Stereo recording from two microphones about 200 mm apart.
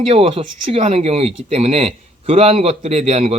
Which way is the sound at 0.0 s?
30° right (ahead or behind).